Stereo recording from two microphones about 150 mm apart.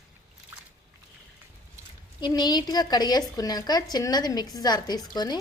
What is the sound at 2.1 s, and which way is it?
A woman's voice, 30° left (ahead or behind).